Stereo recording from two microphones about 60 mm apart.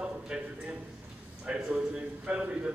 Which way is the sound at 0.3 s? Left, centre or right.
Centre.